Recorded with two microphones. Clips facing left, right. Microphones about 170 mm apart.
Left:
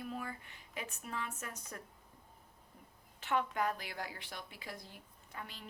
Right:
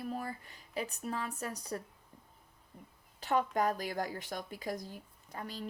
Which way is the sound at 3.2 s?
40° right (ahead or behind).